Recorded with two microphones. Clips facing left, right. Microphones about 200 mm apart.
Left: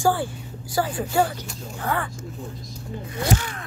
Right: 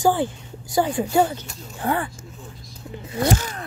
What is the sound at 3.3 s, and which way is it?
Speech, 40° right (ahead or behind).